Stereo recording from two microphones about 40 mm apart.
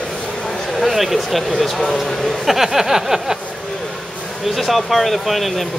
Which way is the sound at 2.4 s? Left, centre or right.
Centre.